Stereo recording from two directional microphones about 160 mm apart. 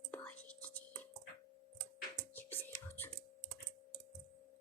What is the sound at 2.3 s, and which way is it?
Whispering, 15° left (ahead or behind).